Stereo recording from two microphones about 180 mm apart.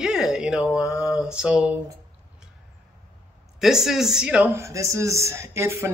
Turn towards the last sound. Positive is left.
turn(degrees=-15)  # may be behind; listen again after turning